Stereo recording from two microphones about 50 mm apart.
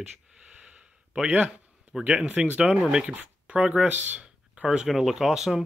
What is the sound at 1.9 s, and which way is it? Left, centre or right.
Speech, centre.